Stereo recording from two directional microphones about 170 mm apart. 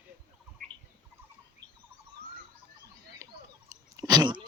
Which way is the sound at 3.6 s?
20° right (ahead or behind).